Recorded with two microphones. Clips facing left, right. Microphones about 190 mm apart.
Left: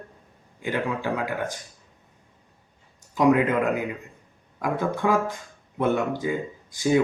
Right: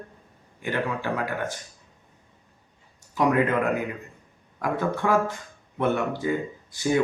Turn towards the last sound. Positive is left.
turn(degrees=15)  # may be behind; listen again after turning